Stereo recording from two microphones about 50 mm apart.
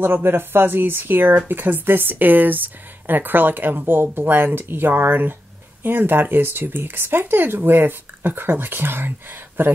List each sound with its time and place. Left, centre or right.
0.0 s speech: right